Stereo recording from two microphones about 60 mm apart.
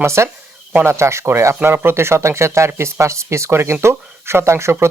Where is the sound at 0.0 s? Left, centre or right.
Right.